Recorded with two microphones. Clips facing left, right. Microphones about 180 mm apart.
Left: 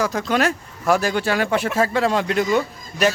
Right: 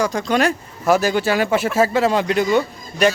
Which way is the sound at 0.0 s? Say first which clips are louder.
Right 2 dB; 5° left (ahead or behind).